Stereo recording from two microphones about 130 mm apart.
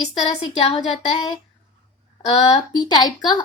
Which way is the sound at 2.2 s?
55° left (ahead or behind).